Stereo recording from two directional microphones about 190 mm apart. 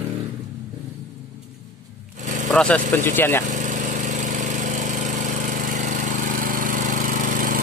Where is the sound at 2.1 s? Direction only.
40° right (ahead or behind).